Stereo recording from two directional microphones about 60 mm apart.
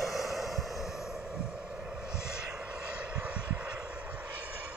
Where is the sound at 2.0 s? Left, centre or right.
Centre.